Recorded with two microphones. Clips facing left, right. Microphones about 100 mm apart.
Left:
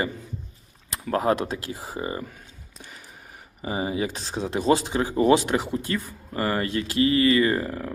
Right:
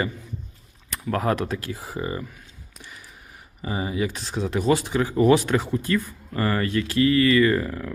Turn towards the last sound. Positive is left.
turn(degrees=35)  # may be behind; listen again after turning